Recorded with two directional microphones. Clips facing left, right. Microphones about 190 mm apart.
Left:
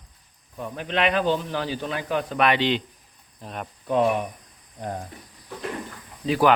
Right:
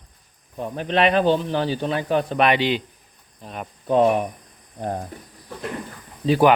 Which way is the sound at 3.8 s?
30° right (ahead or behind).